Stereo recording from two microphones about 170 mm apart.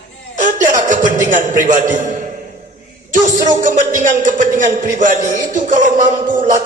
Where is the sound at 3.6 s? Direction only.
50° right (ahead or behind).